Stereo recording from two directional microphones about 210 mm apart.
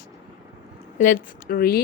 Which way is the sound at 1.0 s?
40° left (ahead or behind).